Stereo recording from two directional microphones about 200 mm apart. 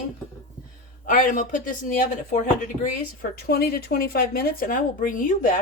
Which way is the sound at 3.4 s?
50° left (ahead or behind).